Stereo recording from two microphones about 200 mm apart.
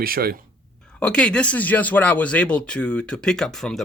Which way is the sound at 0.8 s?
5° left (ahead or behind).